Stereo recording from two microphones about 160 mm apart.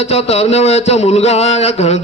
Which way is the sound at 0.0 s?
40° left (ahead or behind).